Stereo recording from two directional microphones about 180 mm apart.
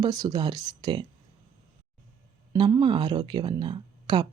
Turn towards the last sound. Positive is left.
turn(degrees=-25)  # may be behind; listen again after turning